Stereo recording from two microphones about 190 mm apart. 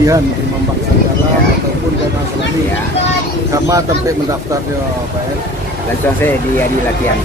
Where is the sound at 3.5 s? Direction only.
15° right (ahead or behind).